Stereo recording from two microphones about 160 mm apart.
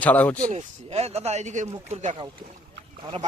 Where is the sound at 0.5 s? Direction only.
40° right (ahead or behind).